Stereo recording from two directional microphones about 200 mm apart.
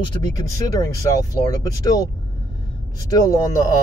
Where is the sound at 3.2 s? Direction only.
15° left (ahead or behind).